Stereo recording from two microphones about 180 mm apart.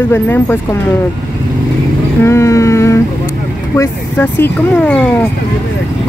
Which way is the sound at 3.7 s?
15° left (ahead or behind).